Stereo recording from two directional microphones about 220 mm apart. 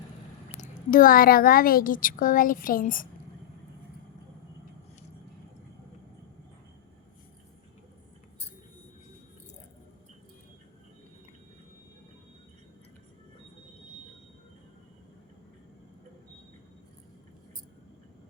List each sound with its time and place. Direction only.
0.6 s a woman's voice: 35° left (ahead or behind)